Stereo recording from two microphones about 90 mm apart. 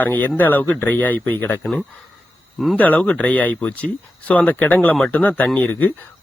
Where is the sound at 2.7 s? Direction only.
15° left (ahead or behind).